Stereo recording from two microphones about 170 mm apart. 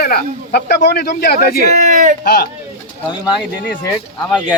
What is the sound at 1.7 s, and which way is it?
Speech, 45° right (ahead or behind).